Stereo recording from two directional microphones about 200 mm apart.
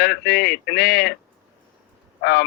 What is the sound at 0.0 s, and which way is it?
A man's voice, 50° left (ahead or behind).